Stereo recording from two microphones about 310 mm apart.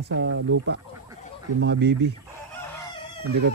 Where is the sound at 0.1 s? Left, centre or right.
Right.